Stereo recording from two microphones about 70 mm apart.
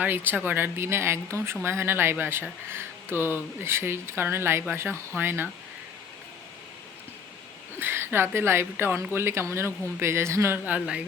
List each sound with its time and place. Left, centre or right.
0.0 s speech: right
7.8 s a woman's voice: right
10.7 s speech: centre